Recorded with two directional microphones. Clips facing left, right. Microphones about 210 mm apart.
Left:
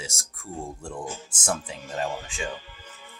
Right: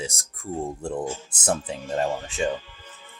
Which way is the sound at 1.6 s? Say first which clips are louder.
Right 5 dB; 40° right (ahead or behind).